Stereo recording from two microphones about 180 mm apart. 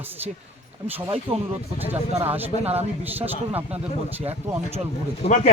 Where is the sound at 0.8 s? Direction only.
35° right (ahead or behind).